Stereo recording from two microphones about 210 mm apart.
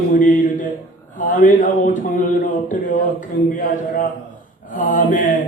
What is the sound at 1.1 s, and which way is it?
Speech, 40° left (ahead or behind).